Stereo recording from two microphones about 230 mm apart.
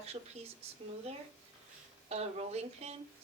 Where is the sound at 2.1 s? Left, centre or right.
Right.